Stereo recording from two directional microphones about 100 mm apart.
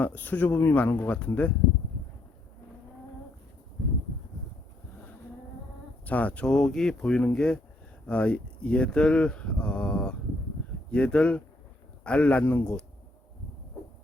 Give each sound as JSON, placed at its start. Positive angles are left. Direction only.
{"t": 0.0, "sound": "speech", "side_deg": 15}
{"t": 6.1, "sound": "speech", "side_deg": 15}